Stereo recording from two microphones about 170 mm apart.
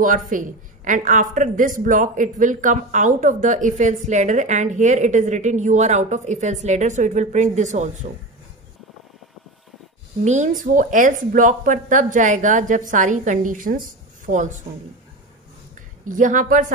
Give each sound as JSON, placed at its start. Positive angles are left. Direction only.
{"t": 0.0, "sound": "a woman's voice", "side_deg": -50}
{"t": 10.2, "sound": "a woman's voice", "side_deg": -45}
{"t": 16.1, "sound": "a woman's voice", "side_deg": -50}